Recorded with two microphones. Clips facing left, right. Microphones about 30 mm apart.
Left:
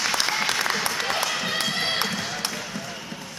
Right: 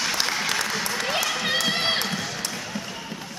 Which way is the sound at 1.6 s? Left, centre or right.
Centre.